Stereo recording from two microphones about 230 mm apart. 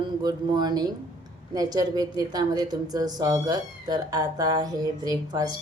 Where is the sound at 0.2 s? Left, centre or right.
Centre.